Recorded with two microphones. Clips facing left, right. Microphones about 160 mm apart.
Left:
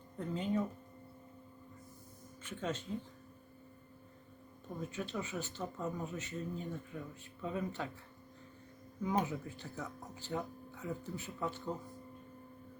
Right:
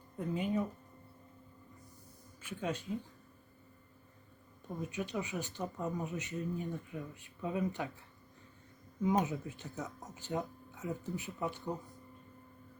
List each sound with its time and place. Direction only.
0.2 s speech: 10° right (ahead or behind)
2.4 s speech: 10° right (ahead or behind)
4.9 s speech: 15° right (ahead or behind)
9.0 s speech: 20° right (ahead or behind)